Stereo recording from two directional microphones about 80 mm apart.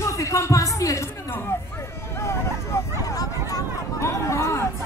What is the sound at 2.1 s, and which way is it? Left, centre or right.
Hubbub, left.